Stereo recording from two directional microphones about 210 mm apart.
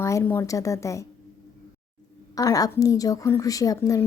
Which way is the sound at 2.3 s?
15° left (ahead or behind).